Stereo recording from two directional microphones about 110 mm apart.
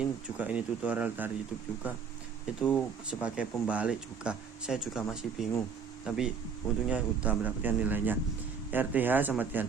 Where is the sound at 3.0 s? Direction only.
10° right (ahead or behind).